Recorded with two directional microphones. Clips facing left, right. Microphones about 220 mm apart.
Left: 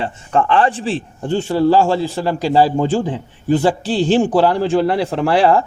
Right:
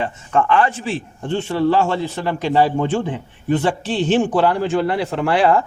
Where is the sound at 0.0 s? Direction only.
30° left (ahead or behind).